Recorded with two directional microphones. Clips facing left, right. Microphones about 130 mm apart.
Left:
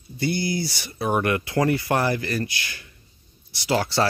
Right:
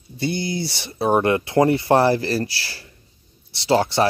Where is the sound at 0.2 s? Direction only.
25° right (ahead or behind).